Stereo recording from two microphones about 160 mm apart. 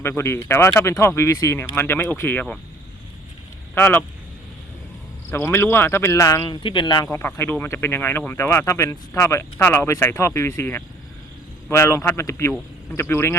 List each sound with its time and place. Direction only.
0.0 s speech: 15° left (ahead or behind)
3.8 s speech: 10° left (ahead or behind)
5.3 s speech: 15° left (ahead or behind)
7.1 s speech: 15° left (ahead or behind)